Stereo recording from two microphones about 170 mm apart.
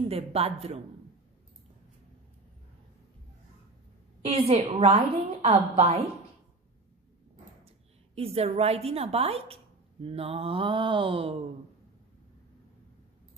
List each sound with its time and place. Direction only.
0.1 s a woman's voice: 35° right (ahead or behind)
4.2 s a woman's voice: 35° right (ahead or behind)
8.1 s a woman's voice: 35° right (ahead or behind)